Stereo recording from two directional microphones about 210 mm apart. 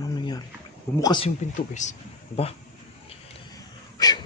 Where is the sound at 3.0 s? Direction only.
20° left (ahead or behind).